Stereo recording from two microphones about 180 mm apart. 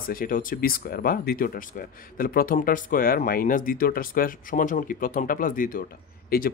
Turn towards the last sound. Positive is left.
turn(degrees=55)  # may be behind; listen again after turning